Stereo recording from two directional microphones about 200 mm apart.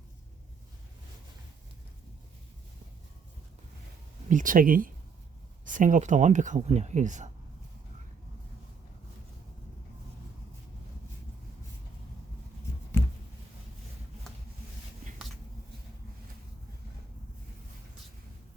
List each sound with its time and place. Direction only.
4.3 s speech: 40° right (ahead or behind)